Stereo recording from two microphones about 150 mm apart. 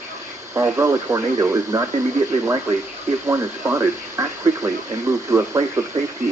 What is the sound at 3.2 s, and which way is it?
Speech, 20° right (ahead or behind).